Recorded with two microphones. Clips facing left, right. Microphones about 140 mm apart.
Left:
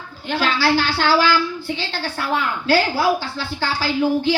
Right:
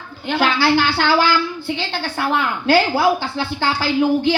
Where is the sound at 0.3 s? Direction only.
60° right (ahead or behind).